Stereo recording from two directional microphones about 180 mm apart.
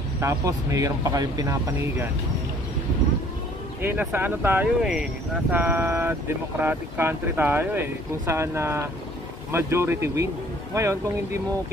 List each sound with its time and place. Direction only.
0.2 s speech: 15° right (ahead or behind)
3.8 s speech: 10° right (ahead or behind)